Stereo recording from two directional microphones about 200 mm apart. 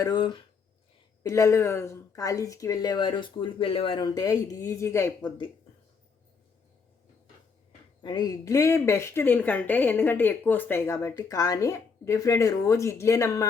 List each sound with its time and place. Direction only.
0.0 s speech: 20° left (ahead or behind)
8.0 s speech: 20° left (ahead or behind)